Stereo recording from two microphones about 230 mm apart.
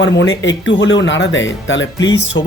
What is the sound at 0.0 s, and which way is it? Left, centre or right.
Speech, left.